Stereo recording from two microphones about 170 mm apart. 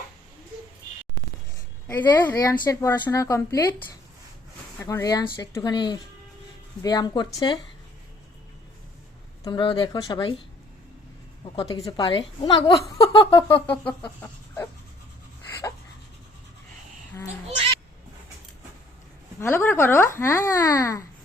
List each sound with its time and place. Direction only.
1.9 s a woman's voice: 15° left (ahead or behind)
4.8 s a woman's voice: 20° left (ahead or behind)
9.4 s a woman's voice: 30° left (ahead or behind)
11.9 s a woman's voice: 25° left (ahead or behind)
13.0 s a sound: 30° left (ahead or behind)
13.8 s chicken: 10° left (ahead or behind)
19.4 s speech: 15° left (ahead or behind)